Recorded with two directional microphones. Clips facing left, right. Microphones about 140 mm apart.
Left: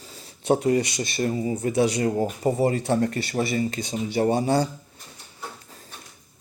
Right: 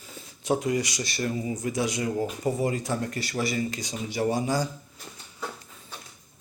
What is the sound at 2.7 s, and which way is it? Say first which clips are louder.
Speech: left 7 dB; 65° left (ahead or behind).